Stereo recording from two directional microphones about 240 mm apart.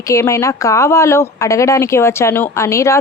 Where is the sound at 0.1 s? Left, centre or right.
Centre.